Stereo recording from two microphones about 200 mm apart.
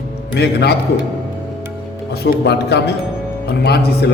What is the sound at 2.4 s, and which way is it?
A man's voice, 55° left (ahead or behind).